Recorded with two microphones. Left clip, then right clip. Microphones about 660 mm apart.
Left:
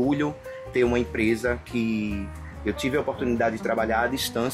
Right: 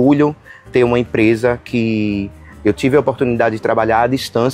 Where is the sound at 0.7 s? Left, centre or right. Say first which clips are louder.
Right 10 dB; right.